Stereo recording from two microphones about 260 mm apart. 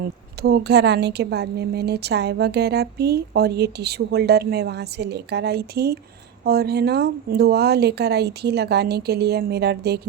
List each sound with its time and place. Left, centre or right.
0.0 s a woman's voice: right